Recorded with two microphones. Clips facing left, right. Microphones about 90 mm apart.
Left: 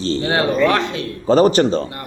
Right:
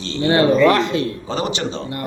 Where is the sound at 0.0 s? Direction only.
40° left (ahead or behind).